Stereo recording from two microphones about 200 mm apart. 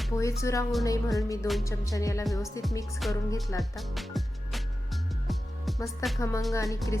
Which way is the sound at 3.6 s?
Centre (ahead or behind).